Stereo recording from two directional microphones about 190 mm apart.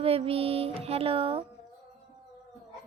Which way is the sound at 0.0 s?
30° right (ahead or behind).